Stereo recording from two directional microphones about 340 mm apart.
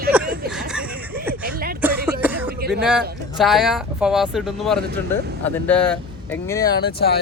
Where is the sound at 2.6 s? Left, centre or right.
Right.